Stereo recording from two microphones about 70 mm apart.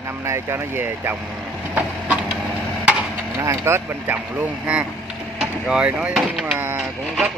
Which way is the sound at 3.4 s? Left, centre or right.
Right.